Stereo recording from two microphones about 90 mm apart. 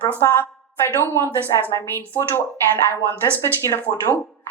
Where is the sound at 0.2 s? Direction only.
30° left (ahead or behind).